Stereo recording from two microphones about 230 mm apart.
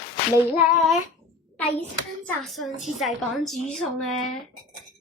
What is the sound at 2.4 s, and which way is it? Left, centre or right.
Speech, centre.